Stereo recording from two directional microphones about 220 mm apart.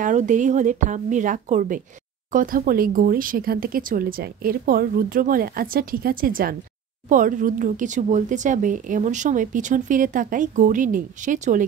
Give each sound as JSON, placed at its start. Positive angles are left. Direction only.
{"t": 0.0, "sound": "speech", "side_deg": -35}